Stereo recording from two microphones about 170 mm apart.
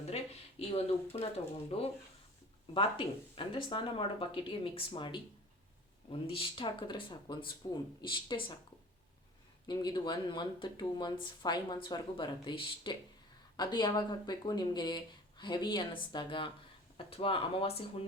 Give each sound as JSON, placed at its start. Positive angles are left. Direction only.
{"t": 0.0, "sound": "speech", "side_deg": 35}
{"t": 3.3, "sound": "speech", "side_deg": 30}
{"t": 9.6, "sound": "speech", "side_deg": 25}